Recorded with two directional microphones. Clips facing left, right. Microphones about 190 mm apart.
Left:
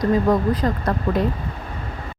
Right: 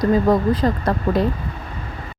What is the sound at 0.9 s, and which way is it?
Speech, 30° right (ahead or behind).